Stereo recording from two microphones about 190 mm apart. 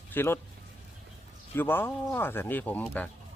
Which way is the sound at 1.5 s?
10° left (ahead or behind).